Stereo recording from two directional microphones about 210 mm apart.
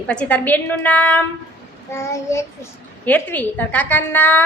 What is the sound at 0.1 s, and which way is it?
A woman's voice, 5° left (ahead or behind).